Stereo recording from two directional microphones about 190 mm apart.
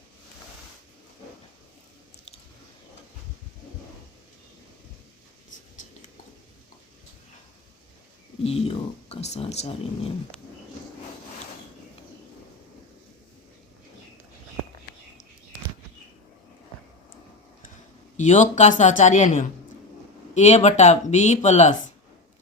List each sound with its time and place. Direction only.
8.4 s speech: 30° left (ahead or behind)
18.2 s speech: 40° left (ahead or behind)